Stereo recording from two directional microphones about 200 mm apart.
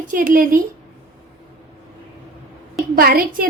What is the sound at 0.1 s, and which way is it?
Speech, 45° right (ahead or behind).